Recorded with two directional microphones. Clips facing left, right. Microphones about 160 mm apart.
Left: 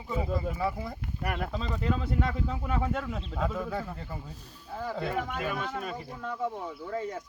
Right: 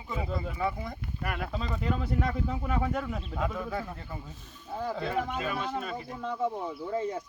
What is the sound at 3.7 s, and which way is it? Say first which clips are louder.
Speech: even; 5° left (ahead or behind).